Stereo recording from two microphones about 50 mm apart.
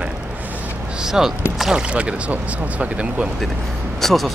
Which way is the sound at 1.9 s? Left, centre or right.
Right.